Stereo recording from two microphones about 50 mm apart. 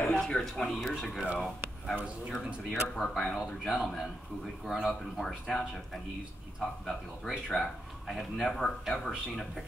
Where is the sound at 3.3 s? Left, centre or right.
Centre.